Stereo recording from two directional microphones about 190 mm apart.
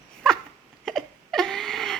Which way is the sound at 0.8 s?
Centre (ahead or behind).